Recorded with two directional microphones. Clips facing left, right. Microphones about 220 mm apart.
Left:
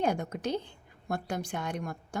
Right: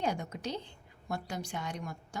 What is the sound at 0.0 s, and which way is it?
A woman's voice, 55° left (ahead or behind).